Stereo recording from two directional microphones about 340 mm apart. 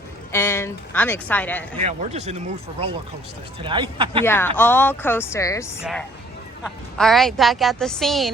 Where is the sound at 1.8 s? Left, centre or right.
Centre.